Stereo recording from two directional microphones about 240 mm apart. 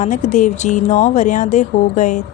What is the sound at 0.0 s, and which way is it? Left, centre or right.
Speech, left.